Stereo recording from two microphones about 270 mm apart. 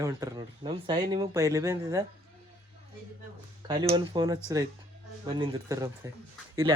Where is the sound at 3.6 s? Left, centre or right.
Centre.